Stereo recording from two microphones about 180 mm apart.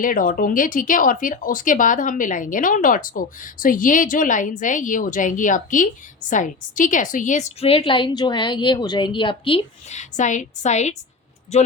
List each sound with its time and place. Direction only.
0.0 s speech: 50° left (ahead or behind)